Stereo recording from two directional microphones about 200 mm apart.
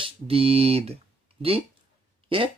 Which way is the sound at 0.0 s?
30° right (ahead or behind).